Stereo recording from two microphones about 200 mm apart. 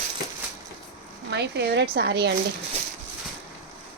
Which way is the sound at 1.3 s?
60° right (ahead or behind).